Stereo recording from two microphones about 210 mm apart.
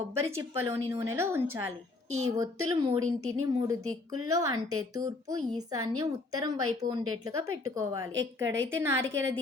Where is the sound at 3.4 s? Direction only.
15° right (ahead or behind).